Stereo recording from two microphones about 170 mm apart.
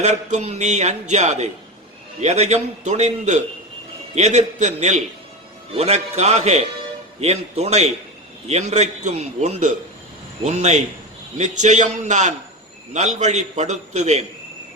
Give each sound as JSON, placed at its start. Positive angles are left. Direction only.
{"t": 0.0, "sound": "a man's voice", "side_deg": -45}